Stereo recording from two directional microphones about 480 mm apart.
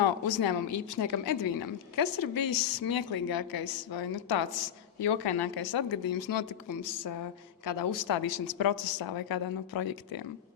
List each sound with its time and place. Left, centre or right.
0.0 s a woman's voice: left